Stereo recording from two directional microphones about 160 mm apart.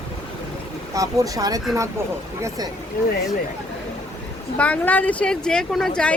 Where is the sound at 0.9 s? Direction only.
20° right (ahead or behind).